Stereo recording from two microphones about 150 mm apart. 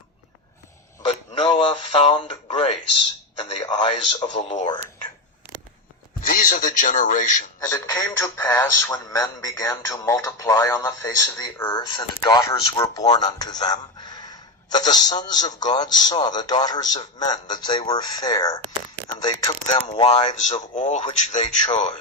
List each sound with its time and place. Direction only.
1.0 s speech: 35° left (ahead or behind)
6.2 s speech: 65° left (ahead or behind)
7.6 s speech: 25° left (ahead or behind)
19.9 s speech: 45° left (ahead or behind)